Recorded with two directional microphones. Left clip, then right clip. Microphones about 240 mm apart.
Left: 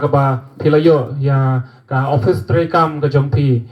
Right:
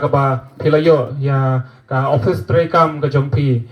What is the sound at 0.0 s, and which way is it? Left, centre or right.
Speech, left.